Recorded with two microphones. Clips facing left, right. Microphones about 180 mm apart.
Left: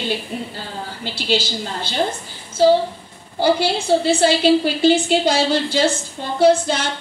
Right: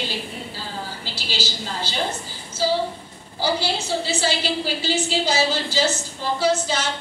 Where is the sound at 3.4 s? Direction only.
55° left (ahead or behind).